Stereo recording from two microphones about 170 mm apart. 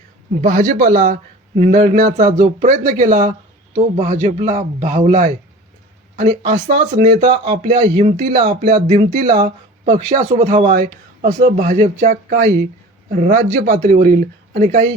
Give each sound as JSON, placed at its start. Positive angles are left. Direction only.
{"t": 0.4, "sound": "speech", "side_deg": -50}